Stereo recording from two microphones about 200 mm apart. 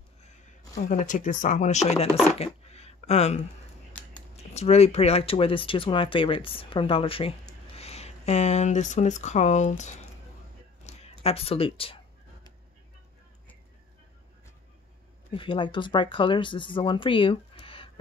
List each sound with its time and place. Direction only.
0.7 s speech: 40° left (ahead or behind)
10.8 s a sound: 35° left (ahead or behind)
11.2 s speech: 30° left (ahead or behind)
15.3 s speech: 25° left (ahead or behind)